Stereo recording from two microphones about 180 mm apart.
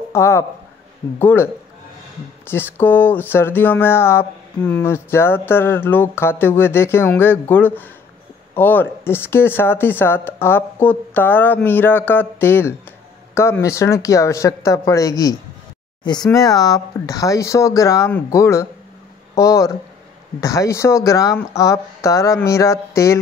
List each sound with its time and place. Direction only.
0.1 s speech: 15° left (ahead or behind)